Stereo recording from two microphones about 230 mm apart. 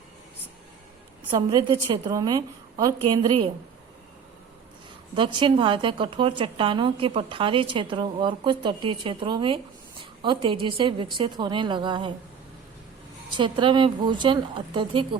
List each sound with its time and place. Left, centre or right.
1.3 s a woman's voice: centre
5.1 s a woman's voice: right
13.3 s a woman's voice: right